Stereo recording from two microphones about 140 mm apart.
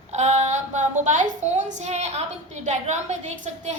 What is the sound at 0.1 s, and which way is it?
A woman's voice, 55° right (ahead or behind).